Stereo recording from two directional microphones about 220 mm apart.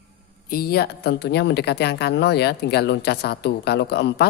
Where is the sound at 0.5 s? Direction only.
45° left (ahead or behind).